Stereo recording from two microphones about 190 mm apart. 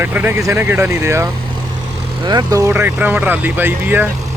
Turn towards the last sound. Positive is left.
turn(degrees=-10)  # may be behind; listen again after turning